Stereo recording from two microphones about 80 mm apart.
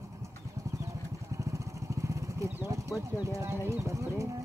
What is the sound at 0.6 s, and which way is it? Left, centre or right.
Clip-clop, right.